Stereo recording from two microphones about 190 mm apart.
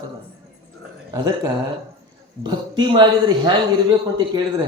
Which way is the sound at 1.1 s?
20° right (ahead or behind).